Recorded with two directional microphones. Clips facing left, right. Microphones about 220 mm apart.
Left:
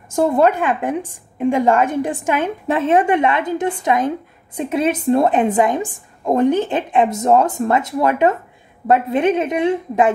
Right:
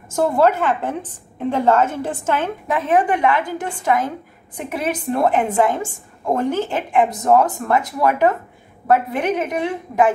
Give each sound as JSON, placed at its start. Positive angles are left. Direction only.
{"t": 0.1, "sound": "a woman's voice", "side_deg": 20}
{"t": 2.7, "sound": "a woman's voice", "side_deg": 25}